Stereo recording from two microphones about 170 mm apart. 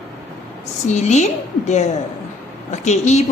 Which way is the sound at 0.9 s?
45° left (ahead or behind).